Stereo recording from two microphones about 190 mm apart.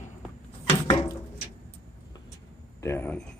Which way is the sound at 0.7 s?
30° left (ahead or behind).